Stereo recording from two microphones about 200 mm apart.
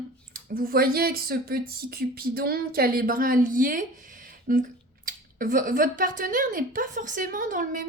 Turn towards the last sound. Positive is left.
turn(degrees=-40)  # may be behind; listen again after turning